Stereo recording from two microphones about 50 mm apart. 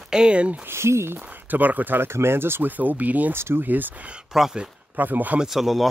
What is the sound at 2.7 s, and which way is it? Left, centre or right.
Speech, right.